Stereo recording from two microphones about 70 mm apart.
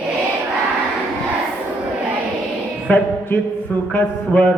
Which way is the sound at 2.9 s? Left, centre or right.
Left.